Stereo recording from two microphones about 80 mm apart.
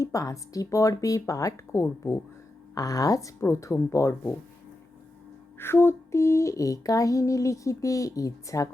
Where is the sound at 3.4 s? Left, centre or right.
Left.